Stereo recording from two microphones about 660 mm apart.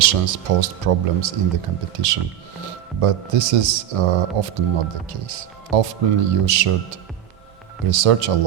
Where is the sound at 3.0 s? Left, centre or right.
Right.